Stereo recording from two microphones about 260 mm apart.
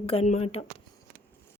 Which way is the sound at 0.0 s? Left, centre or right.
Left.